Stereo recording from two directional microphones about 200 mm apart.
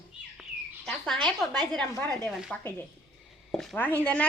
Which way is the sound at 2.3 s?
Centre (ahead or behind).